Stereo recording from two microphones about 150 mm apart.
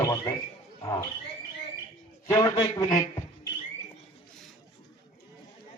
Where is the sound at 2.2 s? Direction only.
25° left (ahead or behind).